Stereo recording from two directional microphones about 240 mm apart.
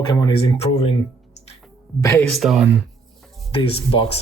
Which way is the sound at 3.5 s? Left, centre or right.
Left.